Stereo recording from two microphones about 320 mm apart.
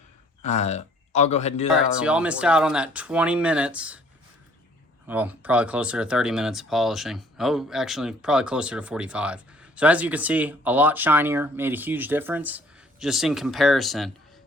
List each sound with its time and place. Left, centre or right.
0.4 s speech: left
1.8 s speech: centre
5.0 s speech: centre